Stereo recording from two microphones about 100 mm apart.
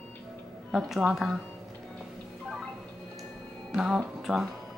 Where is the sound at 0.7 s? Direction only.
5° right (ahead or behind).